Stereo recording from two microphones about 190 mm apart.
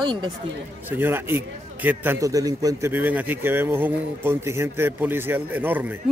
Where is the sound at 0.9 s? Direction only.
10° right (ahead or behind).